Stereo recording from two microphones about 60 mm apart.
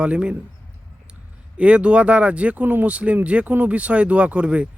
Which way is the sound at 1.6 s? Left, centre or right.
Centre.